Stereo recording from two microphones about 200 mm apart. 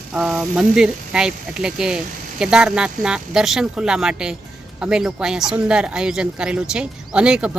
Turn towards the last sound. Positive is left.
turn(degrees=-5)  # may be behind; listen again after turning